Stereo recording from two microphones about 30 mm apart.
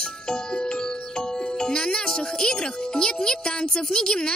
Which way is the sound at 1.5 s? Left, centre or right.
Left.